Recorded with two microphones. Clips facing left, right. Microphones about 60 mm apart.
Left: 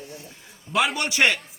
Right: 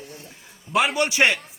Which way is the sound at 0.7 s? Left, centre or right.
Centre.